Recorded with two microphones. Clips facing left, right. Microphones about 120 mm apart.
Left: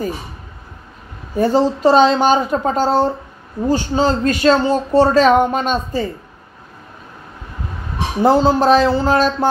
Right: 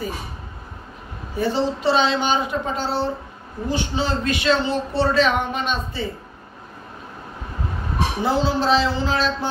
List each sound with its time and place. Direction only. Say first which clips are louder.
1.3 s a man's voice: left 7 dB; 45° left (ahead or behind)
8.2 s speech: left 9 dB; 45° left (ahead or behind)